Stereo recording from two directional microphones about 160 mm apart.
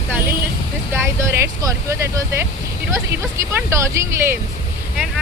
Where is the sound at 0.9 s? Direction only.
15° right (ahead or behind).